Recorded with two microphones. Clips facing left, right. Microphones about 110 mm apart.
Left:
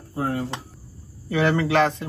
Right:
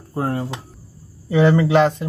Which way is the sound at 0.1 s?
45° right (ahead or behind).